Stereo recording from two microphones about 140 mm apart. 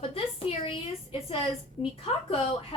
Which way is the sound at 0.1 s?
45° left (ahead or behind).